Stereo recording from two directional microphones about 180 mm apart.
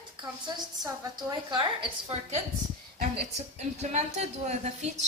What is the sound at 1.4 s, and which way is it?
Speech, 25° right (ahead or behind).